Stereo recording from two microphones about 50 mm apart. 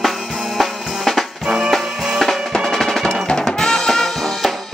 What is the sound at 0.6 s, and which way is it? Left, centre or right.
Drum, centre.